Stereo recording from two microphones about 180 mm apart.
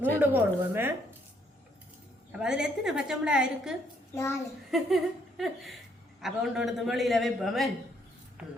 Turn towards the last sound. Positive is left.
turn(degrees=0)  # may be behind; listen again after turning